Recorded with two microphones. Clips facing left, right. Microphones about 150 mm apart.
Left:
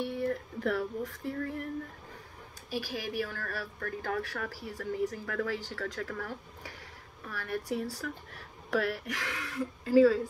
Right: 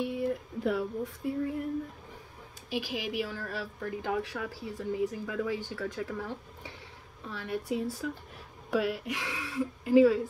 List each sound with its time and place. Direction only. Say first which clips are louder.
0.1 s speech: right 1 dB; 15° right (ahead or behind)
2.7 s speech: right 2 dB; 15° right (ahead or behind)